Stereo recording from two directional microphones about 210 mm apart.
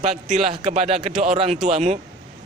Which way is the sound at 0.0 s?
30° right (ahead or behind).